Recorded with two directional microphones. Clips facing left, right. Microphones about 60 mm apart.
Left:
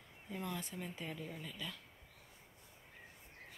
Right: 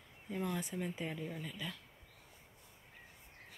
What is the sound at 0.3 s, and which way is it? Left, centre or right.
Speech, centre.